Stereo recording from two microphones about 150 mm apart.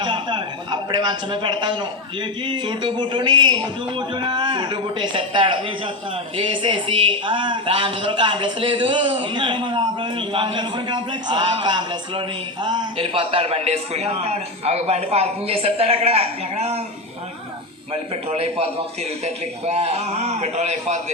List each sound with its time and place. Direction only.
0.0 s a man's voice: 30° right (ahead or behind)
17.9 s a man's voice: 40° right (ahead or behind)